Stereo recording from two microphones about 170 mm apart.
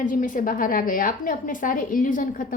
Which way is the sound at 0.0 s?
50° left (ahead or behind).